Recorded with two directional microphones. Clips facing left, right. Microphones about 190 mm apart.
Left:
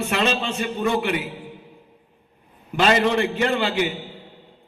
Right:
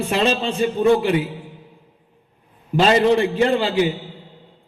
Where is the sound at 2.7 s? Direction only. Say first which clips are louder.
Right 4 dB; 30° right (ahead or behind).